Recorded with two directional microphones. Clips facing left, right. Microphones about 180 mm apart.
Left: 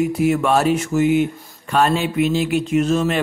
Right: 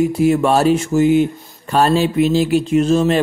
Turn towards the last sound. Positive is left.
turn(degrees=-30)  # may be behind; listen again after turning